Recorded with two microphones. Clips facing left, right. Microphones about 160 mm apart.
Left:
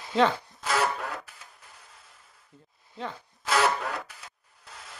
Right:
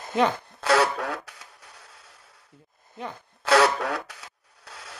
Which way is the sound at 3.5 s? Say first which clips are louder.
Right 5 dB; 80° right.